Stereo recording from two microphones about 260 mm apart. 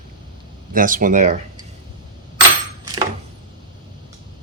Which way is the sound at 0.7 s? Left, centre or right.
Right.